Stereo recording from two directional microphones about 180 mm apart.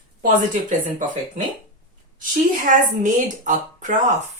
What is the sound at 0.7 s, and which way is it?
Speech, 45° right (ahead or behind).